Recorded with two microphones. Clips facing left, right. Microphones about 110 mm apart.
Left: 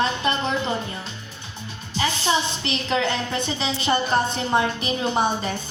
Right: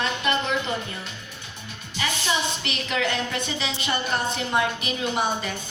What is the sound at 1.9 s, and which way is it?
A woman's voice, 30° left (ahead or behind).